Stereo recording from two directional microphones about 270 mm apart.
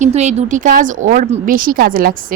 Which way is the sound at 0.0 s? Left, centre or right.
Right.